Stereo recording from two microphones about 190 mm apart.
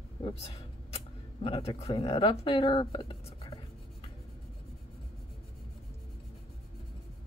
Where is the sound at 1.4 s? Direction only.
30° left (ahead or behind).